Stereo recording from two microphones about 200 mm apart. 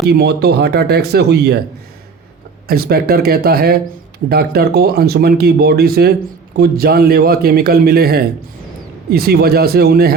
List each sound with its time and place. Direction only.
0.0 s speech: 55° right (ahead or behind)
2.6 s speech: 50° right (ahead or behind)